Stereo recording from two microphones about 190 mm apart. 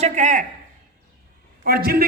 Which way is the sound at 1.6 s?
55° right (ahead or behind).